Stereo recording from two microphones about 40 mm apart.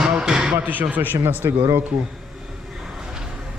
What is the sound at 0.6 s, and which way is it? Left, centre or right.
Speech, right.